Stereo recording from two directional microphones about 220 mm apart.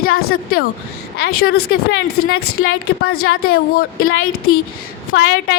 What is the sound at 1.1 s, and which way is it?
Speech, 45° left (ahead or behind).